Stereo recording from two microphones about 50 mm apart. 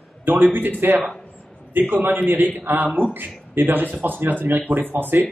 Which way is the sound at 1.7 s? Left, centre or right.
Right.